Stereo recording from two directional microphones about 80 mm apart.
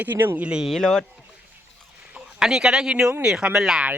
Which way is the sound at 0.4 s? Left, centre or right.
Centre.